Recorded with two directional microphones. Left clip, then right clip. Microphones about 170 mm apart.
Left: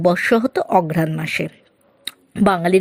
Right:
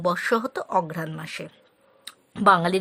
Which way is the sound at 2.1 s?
20° left (ahead or behind).